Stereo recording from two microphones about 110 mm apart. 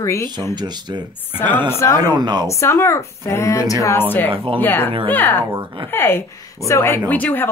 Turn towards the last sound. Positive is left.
turn(degrees=15)  # may be behind; listen again after turning